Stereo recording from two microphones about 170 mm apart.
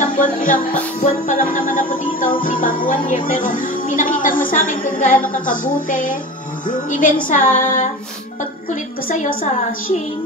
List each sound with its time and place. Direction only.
0.0 s music: 50° left (ahead or behind)
9.1 s a woman's voice: 55° left (ahead or behind)